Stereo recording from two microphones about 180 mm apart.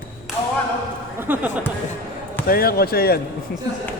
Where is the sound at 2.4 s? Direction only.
55° left (ahead or behind).